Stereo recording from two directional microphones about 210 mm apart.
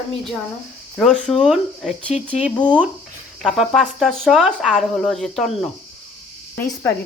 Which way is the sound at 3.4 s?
Centre (ahead or behind).